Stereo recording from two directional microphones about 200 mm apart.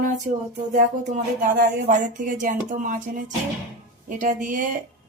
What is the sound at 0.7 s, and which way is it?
A man's voice, 40° right (ahead or behind).